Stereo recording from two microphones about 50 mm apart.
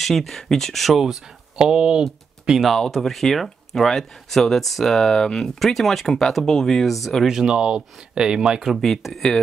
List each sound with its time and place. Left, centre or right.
0.0 s speech: centre
1.6 s speech: centre
2.6 s speech: centre
7.2 s speech: centre
8.8 s speech: centre